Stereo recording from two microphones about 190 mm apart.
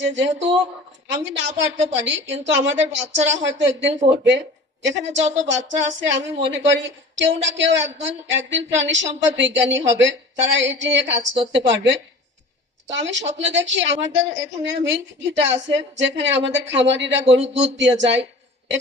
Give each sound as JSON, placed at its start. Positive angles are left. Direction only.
{"t": 0.0, "sound": "a woman's voice", "side_deg": -70}
{"t": 12.9, "sound": "a woman's voice", "side_deg": -75}
{"t": 17.4, "sound": "speech", "side_deg": -35}
{"t": 17.7, "sound": "a woman's voice", "side_deg": -70}